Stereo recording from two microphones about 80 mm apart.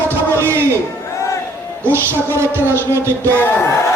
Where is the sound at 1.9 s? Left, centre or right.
Right.